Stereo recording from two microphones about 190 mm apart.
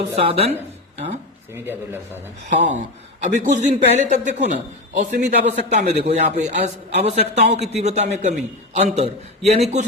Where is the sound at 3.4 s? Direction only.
40° right (ahead or behind).